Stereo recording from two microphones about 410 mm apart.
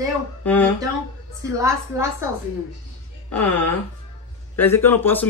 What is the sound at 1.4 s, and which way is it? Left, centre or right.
Speech, centre.